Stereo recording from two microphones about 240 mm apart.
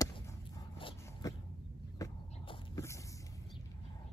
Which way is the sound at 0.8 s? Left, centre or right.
Centre.